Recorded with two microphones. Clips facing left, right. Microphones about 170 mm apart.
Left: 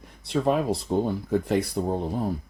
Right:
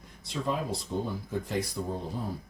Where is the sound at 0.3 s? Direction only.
60° left (ahead or behind).